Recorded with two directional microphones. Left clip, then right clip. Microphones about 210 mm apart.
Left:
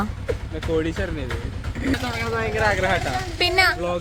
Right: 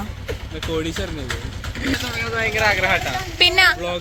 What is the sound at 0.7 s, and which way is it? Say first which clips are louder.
Speech: left 2 dB; 50° right (ahead or behind).